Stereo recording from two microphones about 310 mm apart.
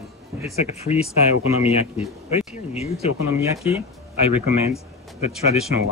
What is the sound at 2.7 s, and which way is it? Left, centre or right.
Speech, centre.